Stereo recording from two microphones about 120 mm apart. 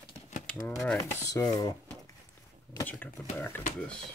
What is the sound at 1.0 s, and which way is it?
Dishes, 25° left (ahead or behind).